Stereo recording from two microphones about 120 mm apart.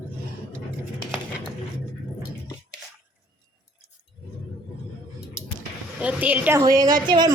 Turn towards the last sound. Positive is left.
turn(degrees=-40)  # may be behind; listen again after turning